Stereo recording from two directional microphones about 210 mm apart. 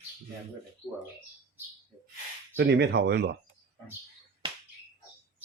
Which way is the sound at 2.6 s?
55° right (ahead or behind).